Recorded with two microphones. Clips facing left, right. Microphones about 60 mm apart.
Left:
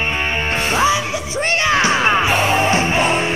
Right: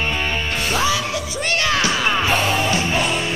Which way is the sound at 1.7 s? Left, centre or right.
Left.